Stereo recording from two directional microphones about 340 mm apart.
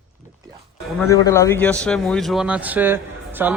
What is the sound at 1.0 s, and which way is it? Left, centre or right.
Speech, centre.